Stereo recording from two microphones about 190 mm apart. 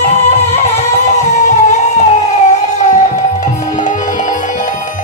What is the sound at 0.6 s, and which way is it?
Music, 35° left (ahead or behind).